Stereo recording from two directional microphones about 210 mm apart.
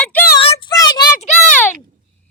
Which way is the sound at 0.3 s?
25° left (ahead or behind).